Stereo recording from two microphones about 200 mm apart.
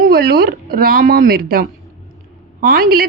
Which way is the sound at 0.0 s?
50° right (ahead or behind).